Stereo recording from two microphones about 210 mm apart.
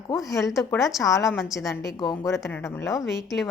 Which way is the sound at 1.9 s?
20° left (ahead or behind).